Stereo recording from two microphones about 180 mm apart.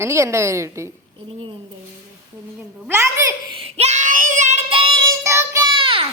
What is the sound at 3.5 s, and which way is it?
Child singing, 30° right (ahead or behind).